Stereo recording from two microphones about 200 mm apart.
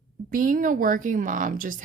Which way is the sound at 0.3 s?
40° right (ahead or behind).